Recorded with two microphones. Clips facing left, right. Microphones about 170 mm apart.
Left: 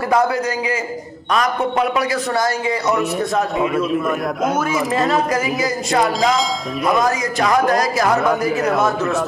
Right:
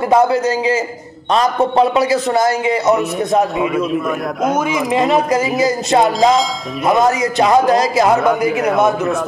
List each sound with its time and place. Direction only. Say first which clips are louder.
0.1 s speech: right 5 dB; 25° right (ahead or behind)
3.5 s speech: right 1 dB; centre (ahead or behind)
4.6 s speech: right 3 dB; 15° right (ahead or behind)
6.3 s speech: right 3 dB; centre (ahead or behind)
7.1 s speech: right 5 dB; 25° right (ahead or behind)
8.2 s speech: right 3 dB; centre (ahead or behind)